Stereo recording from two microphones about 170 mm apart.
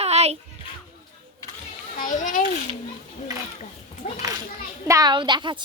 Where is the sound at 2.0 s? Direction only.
50° left (ahead or behind).